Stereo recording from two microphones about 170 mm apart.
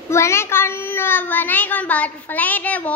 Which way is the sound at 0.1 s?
15° left (ahead or behind).